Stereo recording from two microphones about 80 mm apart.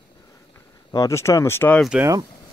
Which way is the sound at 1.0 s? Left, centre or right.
Left.